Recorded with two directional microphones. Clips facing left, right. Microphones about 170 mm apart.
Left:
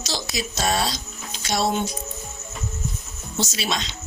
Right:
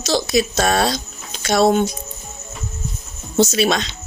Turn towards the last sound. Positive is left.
turn(degrees=-60)  # may be behind; listen again after turning